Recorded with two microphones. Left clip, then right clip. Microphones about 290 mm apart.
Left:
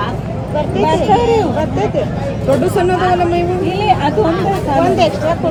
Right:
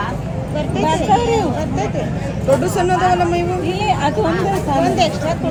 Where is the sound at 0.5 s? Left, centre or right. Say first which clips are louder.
Left 4 dB; left.